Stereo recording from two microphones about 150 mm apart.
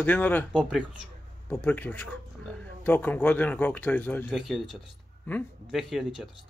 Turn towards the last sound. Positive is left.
turn(degrees=0)  # may be behind; listen again after turning